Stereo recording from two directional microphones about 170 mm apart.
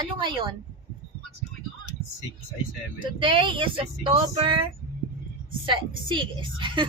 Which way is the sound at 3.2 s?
30° right (ahead or behind).